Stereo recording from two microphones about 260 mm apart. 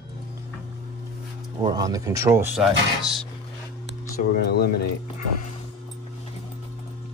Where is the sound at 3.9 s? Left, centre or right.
Left.